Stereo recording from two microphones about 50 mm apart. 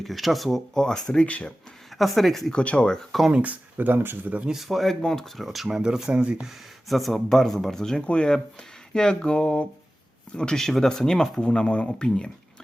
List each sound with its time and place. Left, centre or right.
0.0 s speech: centre
1.3 s a sound: left
2.0 s speech: centre
2.5 s a sound: left
3.3 s speech: right
4.7 s speech: centre
5.4 s speech: centre
5.6 s speech: centre
6.8 s speech: centre
8.0 s a sound: centre
10.3 s speech: centre